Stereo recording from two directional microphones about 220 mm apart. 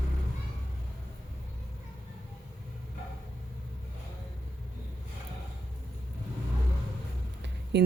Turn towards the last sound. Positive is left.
turn(degrees=-50)  # may be behind; listen again after turning